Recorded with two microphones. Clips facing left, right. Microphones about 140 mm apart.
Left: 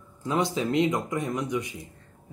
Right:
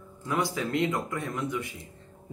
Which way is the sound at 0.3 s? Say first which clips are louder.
Left 3 dB; 20° left (ahead or behind).